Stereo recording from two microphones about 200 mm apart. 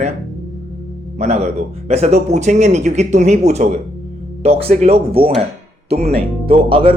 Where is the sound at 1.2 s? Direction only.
35° right (ahead or behind).